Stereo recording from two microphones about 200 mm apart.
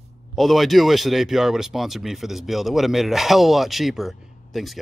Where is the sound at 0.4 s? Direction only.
Centre (ahead or behind).